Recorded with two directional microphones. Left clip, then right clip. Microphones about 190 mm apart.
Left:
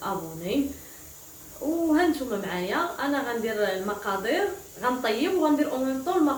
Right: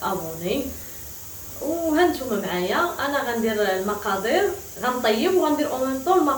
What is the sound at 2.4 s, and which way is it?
Speech, centre (ahead or behind).